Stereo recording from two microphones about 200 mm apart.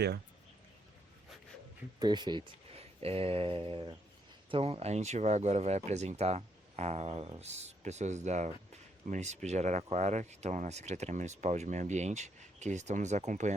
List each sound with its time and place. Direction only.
2.0 s speech: 20° right (ahead or behind)